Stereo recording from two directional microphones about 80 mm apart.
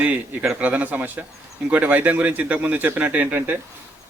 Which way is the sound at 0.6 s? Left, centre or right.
Centre.